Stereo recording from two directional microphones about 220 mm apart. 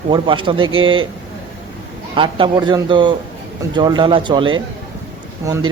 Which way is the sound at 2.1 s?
20° right (ahead or behind).